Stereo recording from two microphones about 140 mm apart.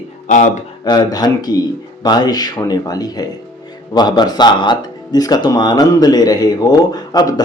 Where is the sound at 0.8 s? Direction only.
30° left (ahead or behind).